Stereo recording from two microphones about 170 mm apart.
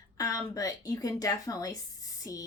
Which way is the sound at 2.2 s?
20° left (ahead or behind).